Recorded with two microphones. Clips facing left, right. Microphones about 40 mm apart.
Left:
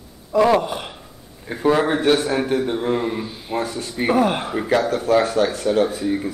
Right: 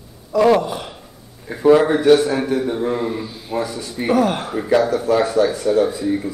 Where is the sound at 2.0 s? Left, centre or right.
Left.